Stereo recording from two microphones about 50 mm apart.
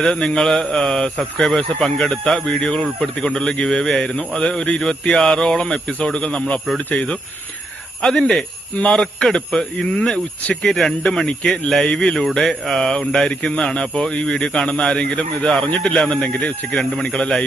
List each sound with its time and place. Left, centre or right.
0.0 s speech: centre
8.0 s speech: centre
11.3 s speech: centre
12.4 s speech: centre
15.1 s speech: left
16.0 s speech: centre